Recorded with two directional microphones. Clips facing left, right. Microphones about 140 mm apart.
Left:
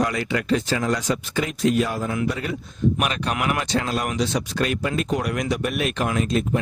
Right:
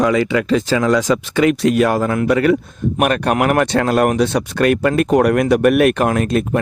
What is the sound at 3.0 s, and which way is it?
Speech, 55° right (ahead or behind).